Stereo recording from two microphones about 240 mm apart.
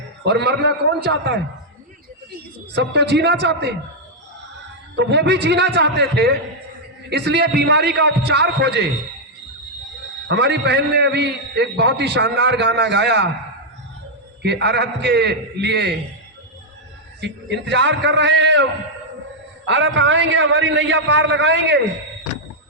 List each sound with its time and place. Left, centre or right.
0.3 s a man's voice: right
2.7 s a man's voice: right
4.9 s a man's voice: right
10.2 s a man's voice: right
14.4 s a man's voice: right
17.2 s a man's voice: right
19.6 s a man's voice: right